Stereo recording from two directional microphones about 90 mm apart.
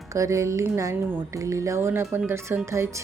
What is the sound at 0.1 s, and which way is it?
Speech, 35° right (ahead or behind).